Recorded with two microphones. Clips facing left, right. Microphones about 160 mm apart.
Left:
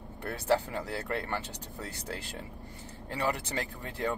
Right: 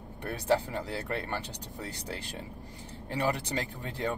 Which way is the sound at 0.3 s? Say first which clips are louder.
Even; 20° right (ahead or behind).